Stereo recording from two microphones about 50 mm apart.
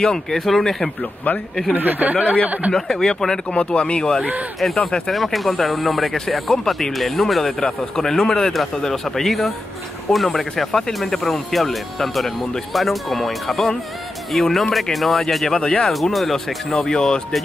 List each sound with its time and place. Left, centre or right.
0.1 s speech: centre
1.8 s speech: right
2.7 s speech: centre
3.5 s speech: left
4.6 s speech: centre
15.5 s speech: centre
15.9 s speech: centre